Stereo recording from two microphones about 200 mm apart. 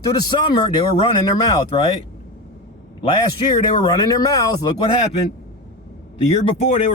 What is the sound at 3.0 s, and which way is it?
Speech, 25° left (ahead or behind).